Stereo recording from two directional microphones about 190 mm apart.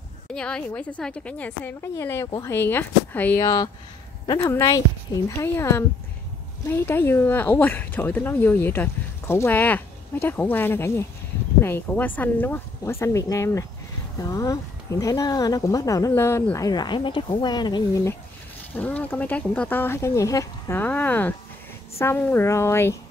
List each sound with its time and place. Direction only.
0.3 s speech: 5° left (ahead or behind)
3.4 s speech: 20° left (ahead or behind)
18.8 s speech: 10° left (ahead or behind)